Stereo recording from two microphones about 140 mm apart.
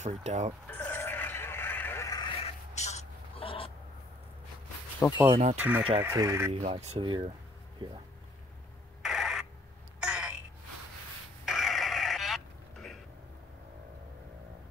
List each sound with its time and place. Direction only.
0.0 s speech: 55° right (ahead or behind)
0.7 s a sound: 15° left (ahead or behind)
2.4 s crow: 55° left (ahead or behind)
5.0 s speech: 10° left (ahead or behind)
5.6 s speech: 10° right (ahead or behind)
6.0 s speech: 20° right (ahead or behind)
6.5 s speech: 50° right (ahead or behind)
7.0 s speech: 35° right (ahead or behind)
9.0 s a sound: centre (ahead or behind)
9.9 s throat clearing: 5° right (ahead or behind)
11.4 s a sound: centre (ahead or behind)